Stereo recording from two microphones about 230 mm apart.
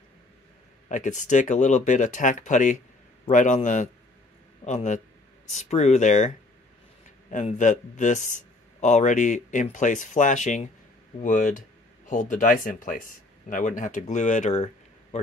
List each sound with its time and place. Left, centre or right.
0.8 s speech: left